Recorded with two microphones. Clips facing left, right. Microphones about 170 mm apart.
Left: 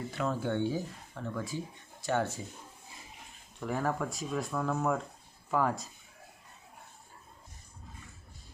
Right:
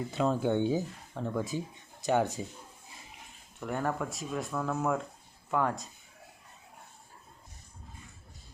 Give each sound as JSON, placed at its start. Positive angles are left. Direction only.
{"t": 0.1, "sound": "speech", "side_deg": -20}
{"t": 3.6, "sound": "speech", "side_deg": 0}